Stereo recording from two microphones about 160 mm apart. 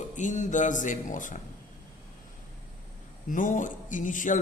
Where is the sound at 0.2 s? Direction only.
50° left (ahead or behind).